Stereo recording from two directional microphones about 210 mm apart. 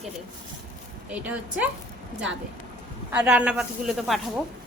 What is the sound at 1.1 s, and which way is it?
Speech, 5° right (ahead or behind).